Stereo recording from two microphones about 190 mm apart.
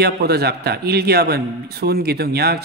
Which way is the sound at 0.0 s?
55° right (ahead or behind).